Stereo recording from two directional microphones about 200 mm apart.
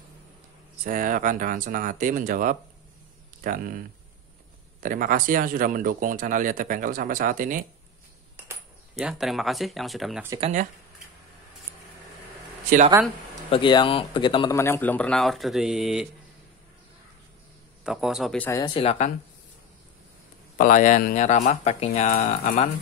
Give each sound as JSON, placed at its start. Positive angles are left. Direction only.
{"t": 0.8, "sound": "speech", "side_deg": -45}
{"t": 8.9, "sound": "speech", "side_deg": 0}
{"t": 10.4, "sound": "speech", "side_deg": -40}
{"t": 12.6, "sound": "speech", "side_deg": -40}
{"t": 13.5, "sound": "a man's voice", "side_deg": 25}
{"t": 17.8, "sound": "speech", "side_deg": -5}
{"t": 18.5, "sound": "speech", "side_deg": 25}
{"t": 20.5, "sound": "speech", "side_deg": 40}